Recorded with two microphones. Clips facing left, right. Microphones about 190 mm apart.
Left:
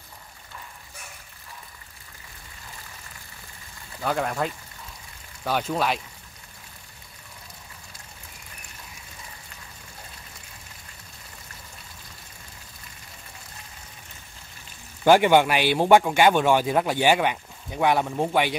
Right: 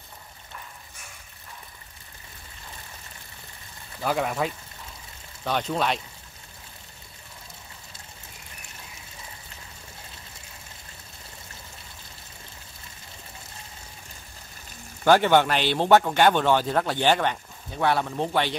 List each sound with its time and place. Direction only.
4.0 s speech: 5° right (ahead or behind)
15.0 s a man's voice: 10° left (ahead or behind)